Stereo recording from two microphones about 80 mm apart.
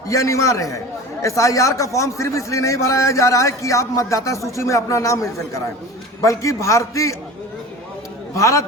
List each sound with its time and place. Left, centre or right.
0.1 s a man's voice: left
8.4 s a man's voice: left